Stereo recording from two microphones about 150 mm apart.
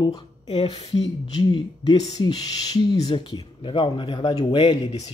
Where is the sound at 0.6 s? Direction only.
45° left (ahead or behind).